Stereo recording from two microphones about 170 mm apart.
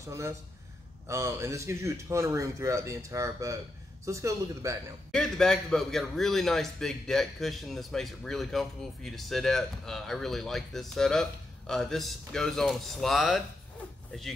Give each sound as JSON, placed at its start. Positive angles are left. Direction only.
{"t": 0.0, "sound": "speech", "side_deg": -20}
{"t": 5.1, "sound": "a man's voice", "side_deg": 5}